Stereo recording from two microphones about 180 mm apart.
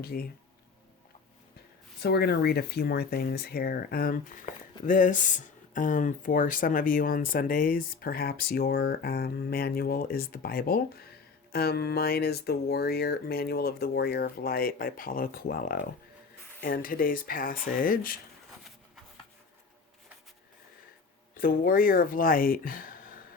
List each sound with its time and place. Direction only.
0.0 s speech: 60° left (ahead or behind)
2.0 s speech: 65° left (ahead or behind)
21.3 s speech: 55° left (ahead or behind)